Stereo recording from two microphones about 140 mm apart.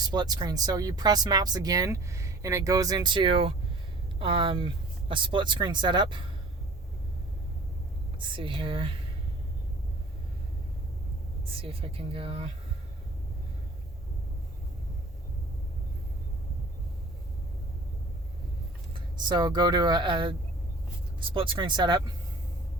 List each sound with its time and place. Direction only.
0.1 s speech: 30° right (ahead or behind)
8.2 s speech: 35° right (ahead or behind)
11.4 s speech: 40° right (ahead or behind)
18.9 s speech: 30° right (ahead or behind)